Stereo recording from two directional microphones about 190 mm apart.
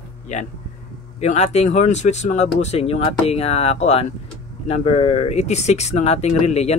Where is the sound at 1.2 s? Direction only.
35° left (ahead or behind).